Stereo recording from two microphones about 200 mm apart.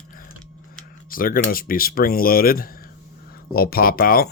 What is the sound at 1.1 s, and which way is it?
Speech, 45° left (ahead or behind).